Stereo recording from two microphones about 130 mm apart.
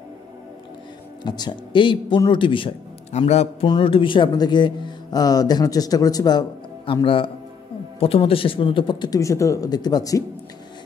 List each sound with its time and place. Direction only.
1.2 s speech: 35° left (ahead or behind)
3.1 s a man's voice: 55° left (ahead or behind)
3.6 s speech: 40° left (ahead or behind)
6.9 s speech: 40° left (ahead or behind)